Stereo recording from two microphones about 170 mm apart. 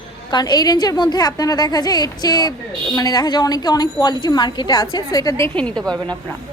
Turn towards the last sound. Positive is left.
turn(degrees=5)  # may be behind; listen again after turning